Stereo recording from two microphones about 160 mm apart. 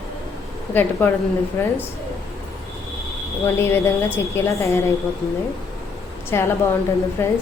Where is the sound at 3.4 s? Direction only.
15° left (ahead or behind).